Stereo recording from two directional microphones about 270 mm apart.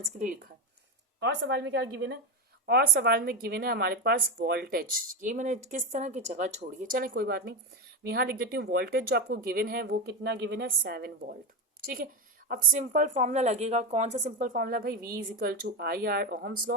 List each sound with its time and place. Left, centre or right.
1.2 s a woman's voice: right
12.5 s a woman's voice: right